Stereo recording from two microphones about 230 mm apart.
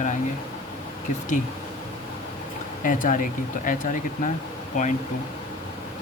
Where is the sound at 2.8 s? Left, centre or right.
Left.